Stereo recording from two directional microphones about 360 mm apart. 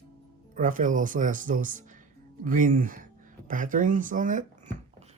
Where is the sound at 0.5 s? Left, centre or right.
Right.